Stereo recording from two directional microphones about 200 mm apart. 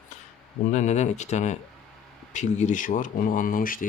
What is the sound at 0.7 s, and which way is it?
Speech, 35° left (ahead or behind).